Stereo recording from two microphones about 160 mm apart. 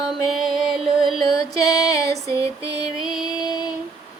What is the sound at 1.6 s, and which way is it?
Music, 20° left (ahead or behind).